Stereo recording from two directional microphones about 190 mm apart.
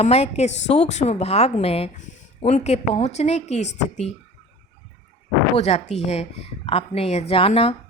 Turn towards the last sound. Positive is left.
turn(degrees=30)  # may be behind; listen again after turning